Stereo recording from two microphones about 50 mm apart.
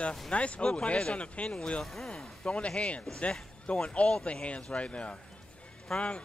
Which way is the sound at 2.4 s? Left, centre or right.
Left.